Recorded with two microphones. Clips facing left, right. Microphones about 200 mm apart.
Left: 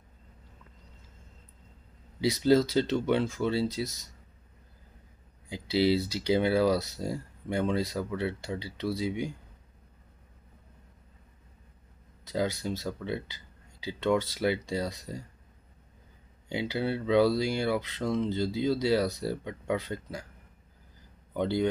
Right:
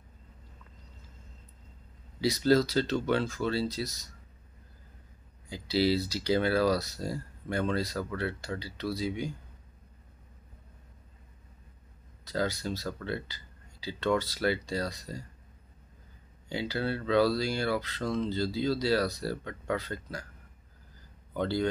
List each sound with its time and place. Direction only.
2.1 s speech: 20° left (ahead or behind)
5.5 s speech: 20° left (ahead or behind)
12.3 s speech: 20° left (ahead or behind)
16.4 s speech: 20° left (ahead or behind)
21.3 s speech: 20° left (ahead or behind)